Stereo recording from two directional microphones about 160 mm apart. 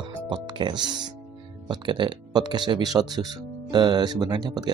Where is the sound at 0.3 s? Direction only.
30° right (ahead or behind).